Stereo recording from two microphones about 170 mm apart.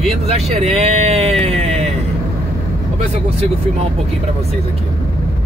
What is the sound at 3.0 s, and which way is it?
Speech, 35° right (ahead or behind).